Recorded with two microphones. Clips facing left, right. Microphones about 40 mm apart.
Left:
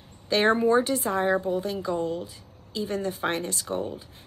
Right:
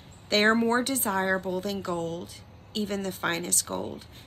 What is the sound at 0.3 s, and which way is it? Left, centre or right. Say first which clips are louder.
Speech: left 1 dB; right.